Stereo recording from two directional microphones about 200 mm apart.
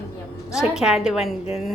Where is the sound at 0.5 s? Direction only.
Centre (ahead or behind).